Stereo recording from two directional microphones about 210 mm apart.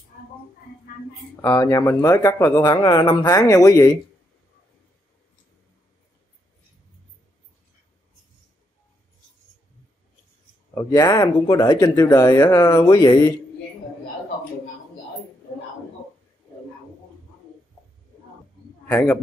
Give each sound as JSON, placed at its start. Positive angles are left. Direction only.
{"t": 1.4, "sound": "speech", "side_deg": 15}
{"t": 10.7, "sound": "speech", "side_deg": 15}
{"t": 18.9, "sound": "speech", "side_deg": 10}